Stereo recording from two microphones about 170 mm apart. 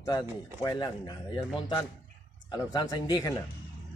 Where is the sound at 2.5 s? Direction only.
25° left (ahead or behind).